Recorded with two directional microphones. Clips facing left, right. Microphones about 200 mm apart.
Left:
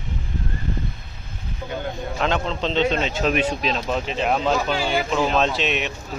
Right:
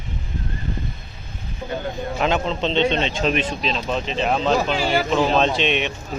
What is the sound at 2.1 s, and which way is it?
Speech, 5° right (ahead or behind).